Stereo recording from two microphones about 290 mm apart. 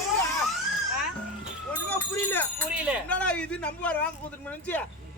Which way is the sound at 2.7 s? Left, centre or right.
Centre.